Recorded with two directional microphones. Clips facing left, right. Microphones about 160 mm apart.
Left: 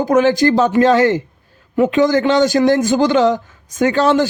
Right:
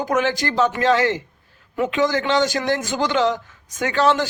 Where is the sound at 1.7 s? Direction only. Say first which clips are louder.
Left 8 dB; 30° left (ahead or behind).